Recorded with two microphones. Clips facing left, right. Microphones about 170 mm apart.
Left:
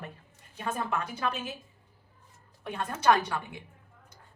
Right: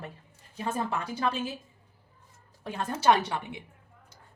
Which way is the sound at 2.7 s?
25° right (ahead or behind).